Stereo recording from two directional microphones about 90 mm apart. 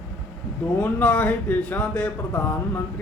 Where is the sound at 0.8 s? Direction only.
20° left (ahead or behind).